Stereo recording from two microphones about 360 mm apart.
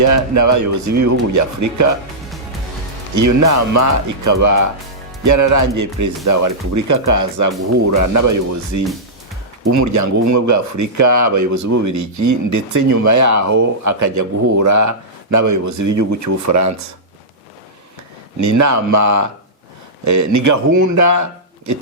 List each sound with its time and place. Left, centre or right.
0.3 s speech: right
3.2 s speech: right
18.3 s speech: right